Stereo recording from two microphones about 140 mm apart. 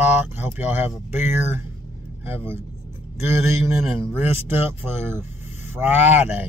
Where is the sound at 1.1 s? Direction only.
15° right (ahead or behind).